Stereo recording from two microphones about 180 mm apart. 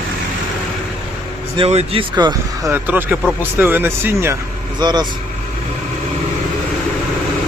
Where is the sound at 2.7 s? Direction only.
10° right (ahead or behind).